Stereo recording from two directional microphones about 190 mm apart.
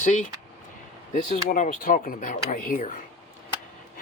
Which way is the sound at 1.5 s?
45° left (ahead or behind).